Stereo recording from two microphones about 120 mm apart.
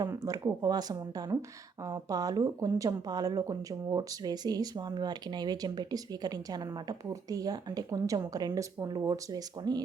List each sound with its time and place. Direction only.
0.1 s speech: 25° right (ahead or behind)